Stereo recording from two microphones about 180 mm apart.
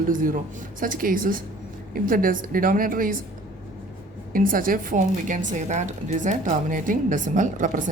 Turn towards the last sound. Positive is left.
turn(degrees=-45)  # may be behind; listen again after turning